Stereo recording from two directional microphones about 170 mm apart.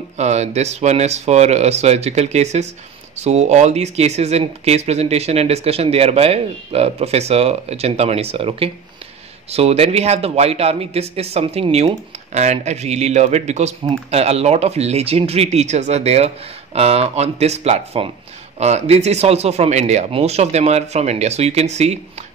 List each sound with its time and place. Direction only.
0.2 s speech: 40° right (ahead or behind)